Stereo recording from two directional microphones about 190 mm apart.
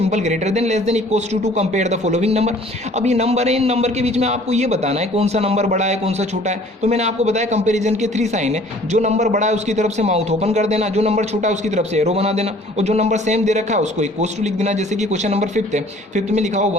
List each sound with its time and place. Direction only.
0.0 s a man's voice: 35° right (ahead or behind)